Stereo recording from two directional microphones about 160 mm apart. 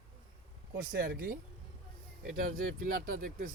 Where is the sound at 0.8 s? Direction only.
65° right (ahead or behind).